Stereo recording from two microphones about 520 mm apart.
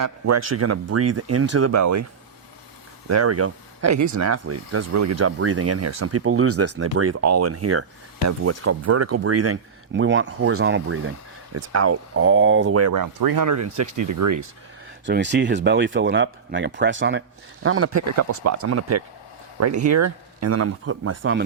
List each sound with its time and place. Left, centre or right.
0.0 s speech: right
3.1 s speech: right
15.0 s speech: centre